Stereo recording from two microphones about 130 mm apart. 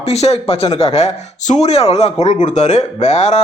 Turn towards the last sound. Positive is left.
turn(degrees=60)  # may be behind; listen again after turning